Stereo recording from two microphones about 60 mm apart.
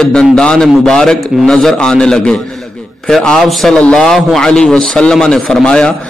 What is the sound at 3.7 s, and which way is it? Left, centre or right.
A man's voice, centre.